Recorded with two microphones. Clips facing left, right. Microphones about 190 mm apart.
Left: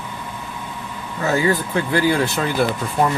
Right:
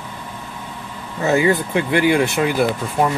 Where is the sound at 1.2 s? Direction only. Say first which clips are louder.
Right 3 dB; 20° right (ahead or behind).